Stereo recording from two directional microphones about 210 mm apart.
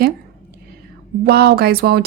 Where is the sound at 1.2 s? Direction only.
50° right (ahead or behind).